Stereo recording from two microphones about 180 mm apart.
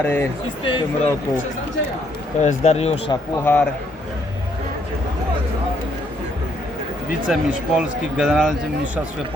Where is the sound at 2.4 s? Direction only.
40° left (ahead or behind).